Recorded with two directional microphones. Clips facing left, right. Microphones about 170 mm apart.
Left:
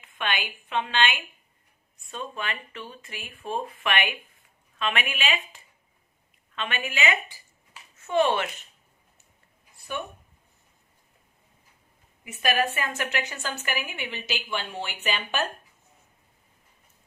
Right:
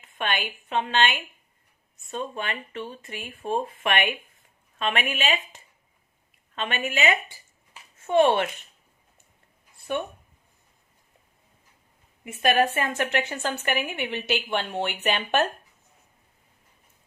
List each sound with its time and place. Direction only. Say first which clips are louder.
0.0 s a woman's voice: right 2 dB; 45° right (ahead or behind)
6.6 s a woman's voice: right 3 dB; 45° right (ahead or behind)
12.4 s a woman's voice: right 4 dB; 50° right (ahead or behind)